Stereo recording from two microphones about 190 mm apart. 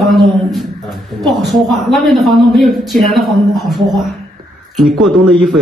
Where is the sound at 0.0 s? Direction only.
Centre (ahead or behind).